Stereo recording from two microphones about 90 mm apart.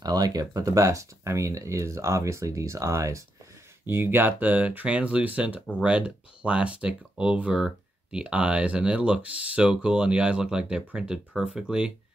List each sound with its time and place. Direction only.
0.0 s speech: 45° right (ahead or behind)
3.8 s speech: 25° right (ahead or behind); by 11.9 s 10° right (ahead or behind)